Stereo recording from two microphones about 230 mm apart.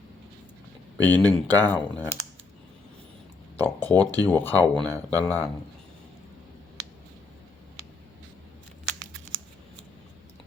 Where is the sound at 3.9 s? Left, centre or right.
Centre.